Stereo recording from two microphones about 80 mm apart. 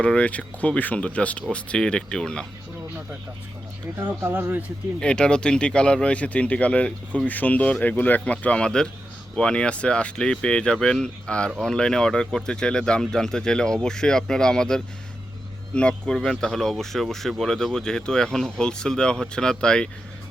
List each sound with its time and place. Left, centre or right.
0.0 s speech: centre
4.0 s speech: right
4.9 s speech: centre